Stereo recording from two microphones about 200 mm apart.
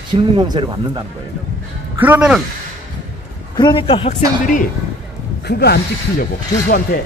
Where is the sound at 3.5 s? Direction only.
25° left (ahead or behind).